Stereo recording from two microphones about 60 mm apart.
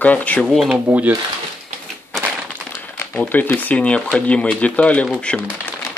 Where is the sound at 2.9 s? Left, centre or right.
Left.